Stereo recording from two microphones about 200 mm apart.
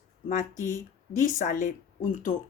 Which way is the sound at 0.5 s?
15° right (ahead or behind).